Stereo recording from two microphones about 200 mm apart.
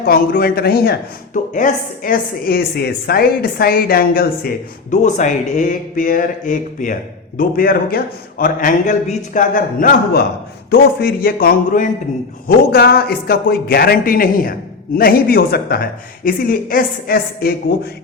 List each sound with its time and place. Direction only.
0.0 s speech: 45° left (ahead or behind)